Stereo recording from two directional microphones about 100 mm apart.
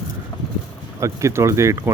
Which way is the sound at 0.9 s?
30° right (ahead or behind).